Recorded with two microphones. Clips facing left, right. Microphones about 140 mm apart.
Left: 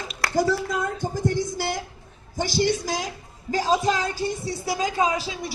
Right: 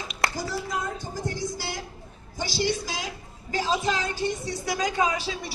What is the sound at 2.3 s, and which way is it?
A woman's voice, 50° left (ahead or behind).